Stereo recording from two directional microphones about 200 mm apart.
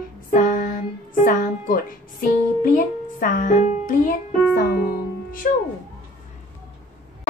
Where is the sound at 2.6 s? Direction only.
40° left (ahead or behind).